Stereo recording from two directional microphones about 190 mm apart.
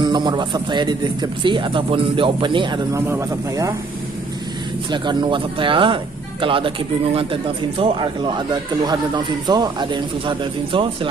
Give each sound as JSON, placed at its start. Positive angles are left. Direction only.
{"t": 0.0, "sound": "a man's voice", "side_deg": -20}
{"t": 3.0, "sound": "speech", "side_deg": -15}
{"t": 4.9, "sound": "a man's voice", "side_deg": -25}